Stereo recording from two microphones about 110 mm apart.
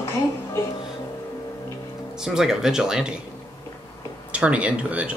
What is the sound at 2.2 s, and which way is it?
Speech, 5° right (ahead or behind).